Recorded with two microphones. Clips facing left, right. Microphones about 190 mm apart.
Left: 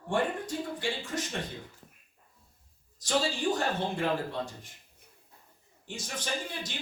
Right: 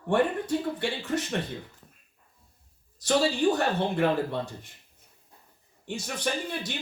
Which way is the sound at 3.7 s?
60° right (ahead or behind).